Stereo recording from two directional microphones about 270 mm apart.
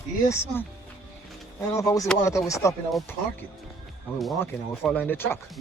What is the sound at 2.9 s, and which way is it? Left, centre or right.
Speech, centre.